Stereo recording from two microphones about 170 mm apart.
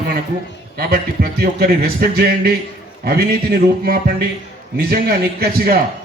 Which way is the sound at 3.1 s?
70° right (ahead or behind).